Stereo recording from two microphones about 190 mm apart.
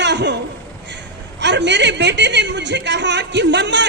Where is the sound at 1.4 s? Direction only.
65° right (ahead or behind).